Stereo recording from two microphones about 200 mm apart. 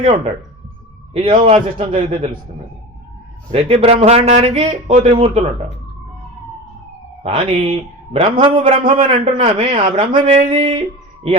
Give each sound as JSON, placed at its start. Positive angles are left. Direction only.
{"t": 1.1, "sound": "a man's voice", "side_deg": -25}
{"t": 3.5, "sound": "speech", "side_deg": -30}
{"t": 7.2, "sound": "a man's voice", "side_deg": -30}